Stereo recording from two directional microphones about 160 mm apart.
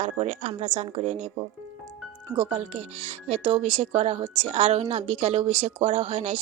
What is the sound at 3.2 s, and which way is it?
A woman's voice, 40° right (ahead or behind).